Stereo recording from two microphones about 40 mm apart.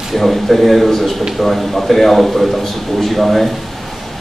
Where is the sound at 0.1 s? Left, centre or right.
Centre.